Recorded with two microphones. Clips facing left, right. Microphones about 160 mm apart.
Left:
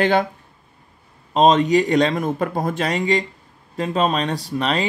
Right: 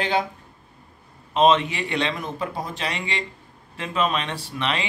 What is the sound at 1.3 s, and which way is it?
Speech, 40° left (ahead or behind).